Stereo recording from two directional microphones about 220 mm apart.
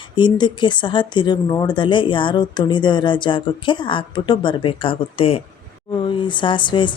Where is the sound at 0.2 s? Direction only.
20° left (ahead or behind).